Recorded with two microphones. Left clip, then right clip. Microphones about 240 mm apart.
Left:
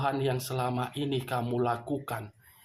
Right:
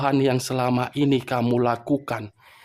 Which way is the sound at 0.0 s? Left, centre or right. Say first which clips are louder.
Right 8 dB; right.